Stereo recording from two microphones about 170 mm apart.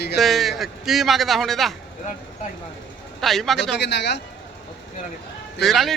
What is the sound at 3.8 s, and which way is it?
Speech, 90° left.